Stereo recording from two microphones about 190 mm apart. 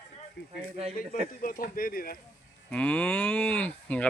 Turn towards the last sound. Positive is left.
turn(degrees=5)  # may be behind; listen again after turning